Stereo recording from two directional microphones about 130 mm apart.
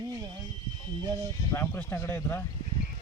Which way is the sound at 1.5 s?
20° left (ahead or behind).